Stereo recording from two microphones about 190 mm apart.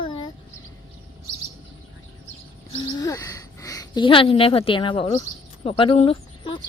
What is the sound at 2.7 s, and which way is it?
A woman's voice, 25° left (ahead or behind).